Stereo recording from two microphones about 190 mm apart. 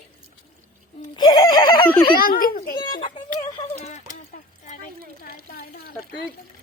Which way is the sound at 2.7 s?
20° left (ahead or behind).